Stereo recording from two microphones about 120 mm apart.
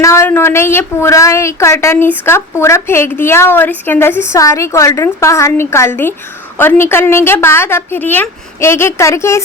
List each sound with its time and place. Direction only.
0.0 s a woman's voice: 25° left (ahead or behind)